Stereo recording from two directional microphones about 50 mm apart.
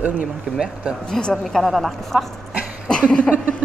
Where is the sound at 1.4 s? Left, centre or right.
Centre.